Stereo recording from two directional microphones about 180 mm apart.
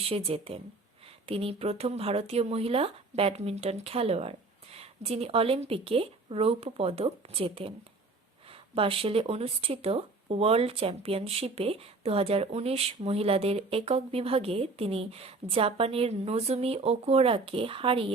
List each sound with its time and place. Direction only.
0.0 s speech: 35° right (ahead or behind)
8.7 s speech: 30° right (ahead or behind)